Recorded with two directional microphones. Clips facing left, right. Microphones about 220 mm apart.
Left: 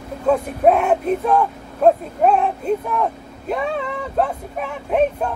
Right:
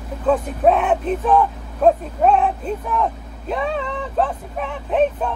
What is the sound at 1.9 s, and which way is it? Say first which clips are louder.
Speech: even; centre (ahead or behind).